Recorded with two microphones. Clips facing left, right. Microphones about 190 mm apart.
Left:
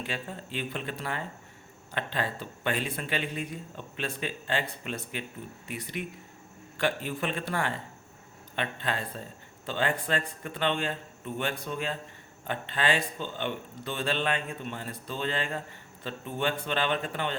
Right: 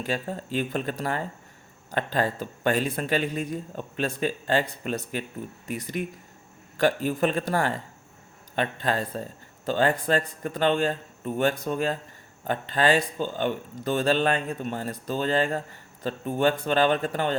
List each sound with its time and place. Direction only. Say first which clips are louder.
0.0 s speech: right 7 dB; 40° right (ahead or behind)